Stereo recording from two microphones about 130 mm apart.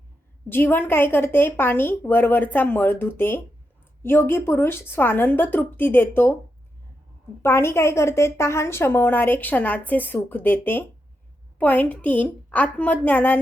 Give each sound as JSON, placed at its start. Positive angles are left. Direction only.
{"t": 0.4, "sound": "a woman's voice", "side_deg": 15}
{"t": 7.4, "sound": "a woman's voice", "side_deg": 20}